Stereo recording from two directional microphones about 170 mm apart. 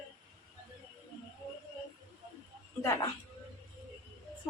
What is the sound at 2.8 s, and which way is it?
Speech, 20° left (ahead or behind).